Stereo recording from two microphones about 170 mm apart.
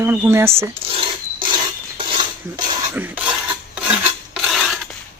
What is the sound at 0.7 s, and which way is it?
Dog, 35° right (ahead or behind).